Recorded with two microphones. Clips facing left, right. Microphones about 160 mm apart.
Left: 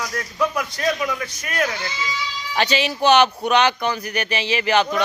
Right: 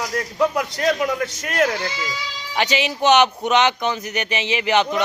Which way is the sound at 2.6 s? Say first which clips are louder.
Even; 15° right (ahead or behind).